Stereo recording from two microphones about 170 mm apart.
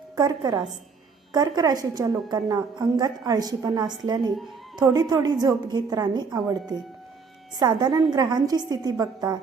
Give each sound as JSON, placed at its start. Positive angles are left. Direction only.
{"t": 0.2, "sound": "a woman's voice", "side_deg": -25}